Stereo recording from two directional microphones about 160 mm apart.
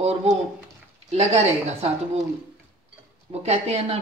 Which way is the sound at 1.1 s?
40° right (ahead or behind).